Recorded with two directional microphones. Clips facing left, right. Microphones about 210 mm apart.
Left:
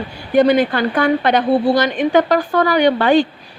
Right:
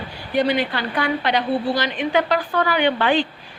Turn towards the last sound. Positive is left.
turn(degrees=40)  # may be behind; listen again after turning